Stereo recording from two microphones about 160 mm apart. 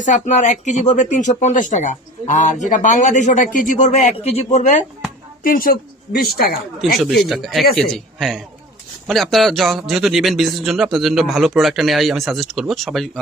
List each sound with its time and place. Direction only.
0.0 s speech: 50° left (ahead or behind)
5.4 s a woman's voice: 65° left (ahead or behind)
7.3 s a man's voice: centre (ahead or behind)